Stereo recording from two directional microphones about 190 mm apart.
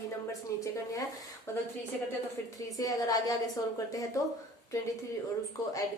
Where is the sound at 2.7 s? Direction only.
20° left (ahead or behind).